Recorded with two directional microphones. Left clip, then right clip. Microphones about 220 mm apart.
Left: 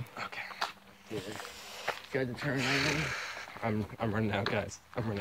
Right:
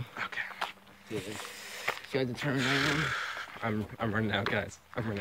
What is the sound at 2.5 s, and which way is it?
Speech, centre (ahead or behind).